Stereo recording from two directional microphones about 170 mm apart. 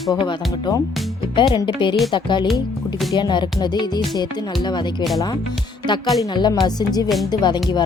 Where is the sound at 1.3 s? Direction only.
30° left (ahead or behind).